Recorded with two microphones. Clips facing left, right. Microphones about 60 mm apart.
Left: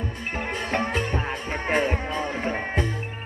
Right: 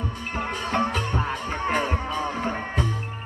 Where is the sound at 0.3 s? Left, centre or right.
Left.